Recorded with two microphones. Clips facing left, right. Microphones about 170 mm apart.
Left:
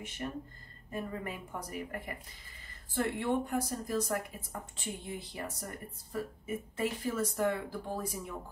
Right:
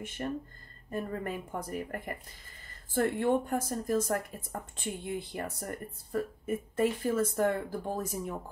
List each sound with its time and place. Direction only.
0.9 s speech: 50° right (ahead or behind)